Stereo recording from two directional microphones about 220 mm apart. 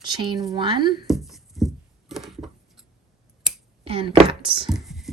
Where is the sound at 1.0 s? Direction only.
Centre (ahead or behind).